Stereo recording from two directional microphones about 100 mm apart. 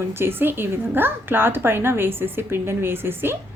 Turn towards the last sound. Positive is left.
turn(degrees=-20)  # may be behind; listen again after turning